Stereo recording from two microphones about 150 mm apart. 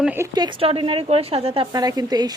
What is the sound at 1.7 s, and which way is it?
Speech, 25° right (ahead or behind).